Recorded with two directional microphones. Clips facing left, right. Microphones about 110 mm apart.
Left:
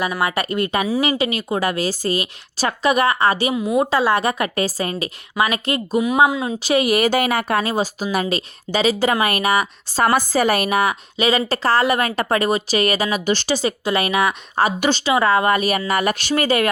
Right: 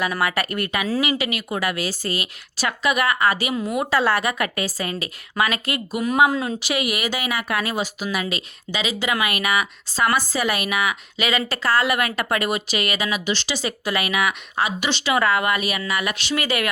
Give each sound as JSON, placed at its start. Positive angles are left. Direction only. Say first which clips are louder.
{"t": 0.0, "sound": "a woman's voice", "louder": "left 2 dB", "side_deg": 20}
{"t": 13.6, "sound": "speech", "louder": "left 5 dB", "side_deg": 30}
{"t": 15.0, "sound": "speech", "louder": "left 3 dB", "side_deg": 30}